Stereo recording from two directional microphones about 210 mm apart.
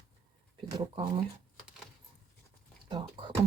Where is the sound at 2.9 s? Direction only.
25° right (ahead or behind).